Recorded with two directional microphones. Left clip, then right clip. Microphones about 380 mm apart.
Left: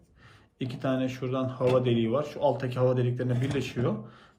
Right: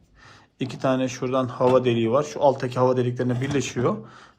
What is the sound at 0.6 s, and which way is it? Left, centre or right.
Speech, centre.